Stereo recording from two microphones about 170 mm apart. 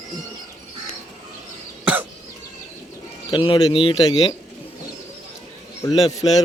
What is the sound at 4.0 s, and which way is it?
Speech, 20° left (ahead or behind).